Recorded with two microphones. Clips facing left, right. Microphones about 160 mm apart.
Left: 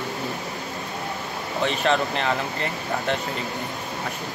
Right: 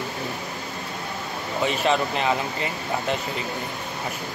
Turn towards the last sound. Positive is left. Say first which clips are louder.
# even
turn(degrees=-5)  # may be behind; listen again after turning